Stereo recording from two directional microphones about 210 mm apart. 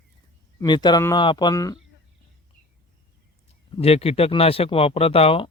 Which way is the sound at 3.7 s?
30° left (ahead or behind).